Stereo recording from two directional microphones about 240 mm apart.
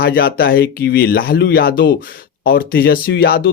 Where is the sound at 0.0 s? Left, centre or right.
Left.